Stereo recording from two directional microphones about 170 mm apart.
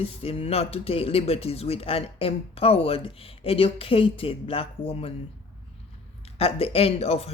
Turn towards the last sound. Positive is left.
turn(degrees=35)  # may be behind; listen again after turning